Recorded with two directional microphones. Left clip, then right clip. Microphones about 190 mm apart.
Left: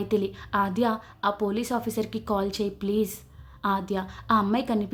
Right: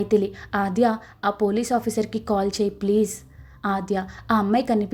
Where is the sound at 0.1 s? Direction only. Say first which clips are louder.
Right 3 dB; 15° right (ahead or behind).